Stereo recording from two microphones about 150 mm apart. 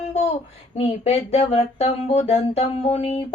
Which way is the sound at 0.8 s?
45° left (ahead or behind).